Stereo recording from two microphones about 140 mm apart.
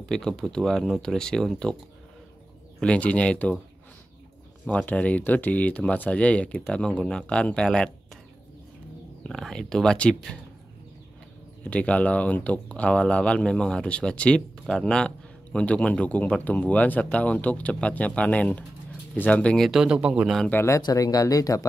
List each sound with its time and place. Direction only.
0.1 s speech: 5° left (ahead or behind)
2.8 s speech: 10° left (ahead or behind)
4.6 s speech: 10° left (ahead or behind)
9.3 s speech: centre (ahead or behind)
11.6 s speech: 10° left (ahead or behind)
20.4 s speech: 15° left (ahead or behind)